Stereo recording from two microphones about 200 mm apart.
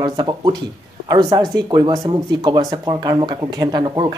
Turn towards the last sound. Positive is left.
turn(degrees=-20)  # may be behind; listen again after turning